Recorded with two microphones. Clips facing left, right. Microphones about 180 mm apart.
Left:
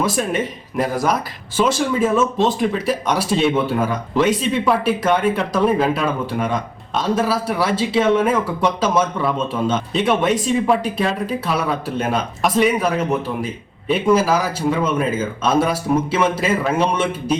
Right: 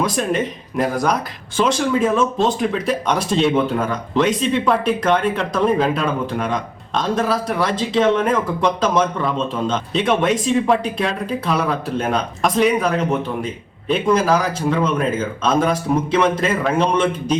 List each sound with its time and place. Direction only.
0.0 s speech: 5° left (ahead or behind)